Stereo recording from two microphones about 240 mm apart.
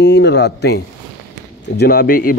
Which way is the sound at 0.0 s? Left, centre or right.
Left.